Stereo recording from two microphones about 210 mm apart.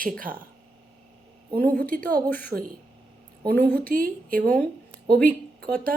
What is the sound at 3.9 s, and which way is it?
Speech, 40° right (ahead or behind).